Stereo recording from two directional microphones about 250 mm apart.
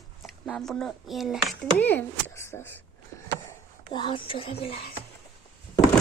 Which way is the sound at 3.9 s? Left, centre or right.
Centre.